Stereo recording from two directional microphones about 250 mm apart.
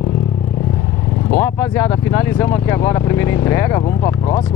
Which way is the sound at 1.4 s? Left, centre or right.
Centre.